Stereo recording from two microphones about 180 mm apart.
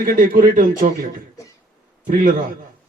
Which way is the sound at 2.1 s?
50° right (ahead or behind).